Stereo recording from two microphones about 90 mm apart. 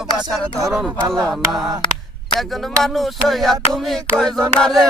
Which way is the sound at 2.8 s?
Centre (ahead or behind).